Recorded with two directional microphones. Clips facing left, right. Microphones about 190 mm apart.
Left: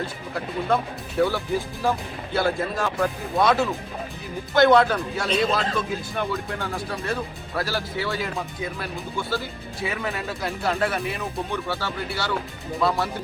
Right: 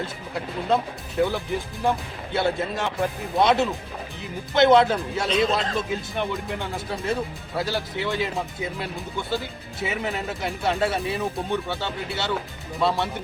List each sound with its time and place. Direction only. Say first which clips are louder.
1.2 s speech: left 1 dB; 20° right (ahead or behind)